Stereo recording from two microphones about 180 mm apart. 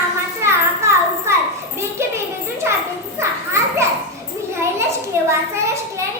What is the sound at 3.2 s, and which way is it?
Children playing, 15° right (ahead or behind).